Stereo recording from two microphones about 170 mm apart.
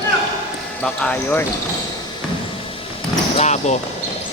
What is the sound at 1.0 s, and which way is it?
Speech, 10° left (ahead or behind).